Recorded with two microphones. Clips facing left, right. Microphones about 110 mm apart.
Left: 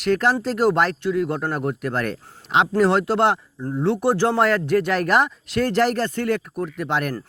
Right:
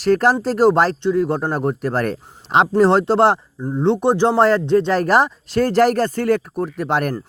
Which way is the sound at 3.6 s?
20° right (ahead or behind).